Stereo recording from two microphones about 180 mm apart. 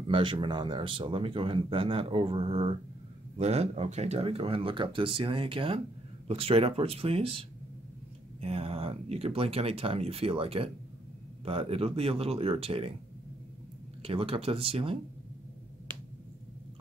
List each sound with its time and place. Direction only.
0.0 s speech: 30° right (ahead or behind)
14.0 s speech: 30° right (ahead or behind)